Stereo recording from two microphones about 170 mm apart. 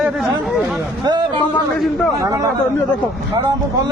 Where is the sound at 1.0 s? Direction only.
25° right (ahead or behind).